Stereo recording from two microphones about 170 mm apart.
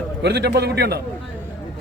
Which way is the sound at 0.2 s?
80° right.